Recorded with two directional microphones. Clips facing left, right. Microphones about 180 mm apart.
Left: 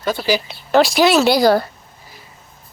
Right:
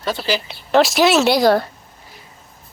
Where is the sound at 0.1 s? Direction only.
10° left (ahead or behind).